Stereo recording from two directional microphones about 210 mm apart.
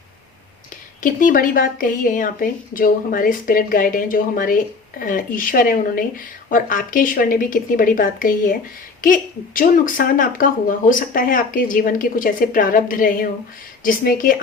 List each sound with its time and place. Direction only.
1.0 s speech: 40° left (ahead or behind)